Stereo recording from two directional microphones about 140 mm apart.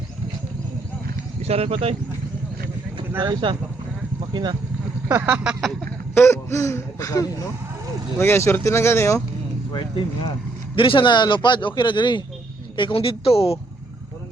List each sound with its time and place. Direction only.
1.4 s speech: 50° right (ahead or behind)
3.2 s speech: 35° right (ahead or behind)
5.0 s speech: 15° right (ahead or behind)
6.1 s a man's voice: 20° left (ahead or behind)
9.7 s a man's voice: 40° left (ahead or behind)